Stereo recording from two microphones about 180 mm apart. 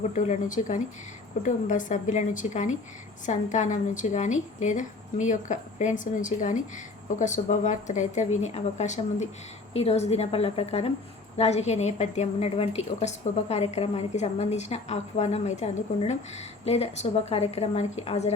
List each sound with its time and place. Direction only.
0.1 s a woman's voice: 45° left (ahead or behind)